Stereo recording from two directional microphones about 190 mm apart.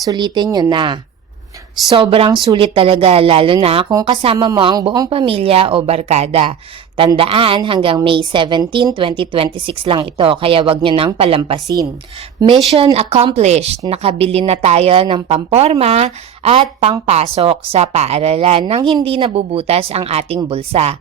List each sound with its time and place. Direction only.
0.0 s a woman's voice: 20° right (ahead or behind)
2.0 s a woman's voice: 30° right (ahead or behind)